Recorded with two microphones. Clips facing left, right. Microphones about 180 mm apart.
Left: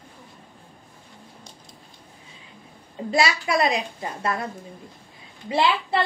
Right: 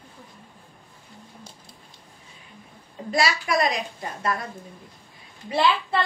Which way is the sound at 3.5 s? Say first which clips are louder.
Left 1 dB; 30° left (ahead or behind).